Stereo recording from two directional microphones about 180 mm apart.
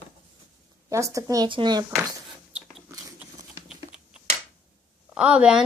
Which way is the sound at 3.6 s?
30° left (ahead or behind).